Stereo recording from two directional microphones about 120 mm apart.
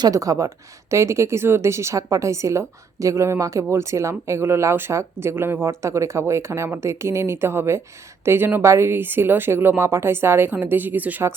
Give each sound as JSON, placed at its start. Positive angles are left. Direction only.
{"t": 0.0, "sound": "speech", "side_deg": -30}